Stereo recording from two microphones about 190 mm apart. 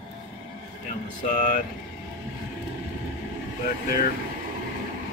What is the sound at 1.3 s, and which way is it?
Speech, 45° left (ahead or behind).